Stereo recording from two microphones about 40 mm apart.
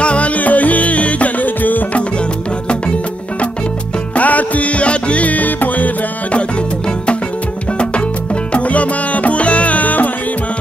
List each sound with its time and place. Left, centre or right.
0.0 s music: left
4.1 s music: left
8.5 s music: left